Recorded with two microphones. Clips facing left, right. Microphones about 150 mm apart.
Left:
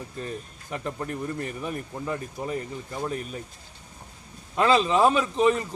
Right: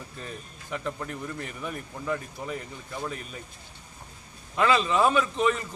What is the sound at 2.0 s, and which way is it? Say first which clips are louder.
Speech: even; 20° left (ahead or behind).